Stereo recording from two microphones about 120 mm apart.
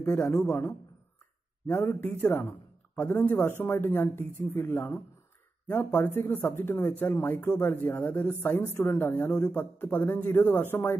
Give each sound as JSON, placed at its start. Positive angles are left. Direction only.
{"t": 0.5, "sound": "a man's voice", "side_deg": 20}